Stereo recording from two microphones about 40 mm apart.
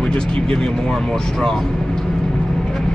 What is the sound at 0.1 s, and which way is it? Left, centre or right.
Speech, left.